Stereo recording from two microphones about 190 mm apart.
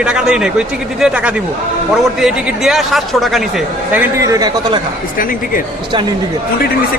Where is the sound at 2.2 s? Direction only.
Centre (ahead or behind).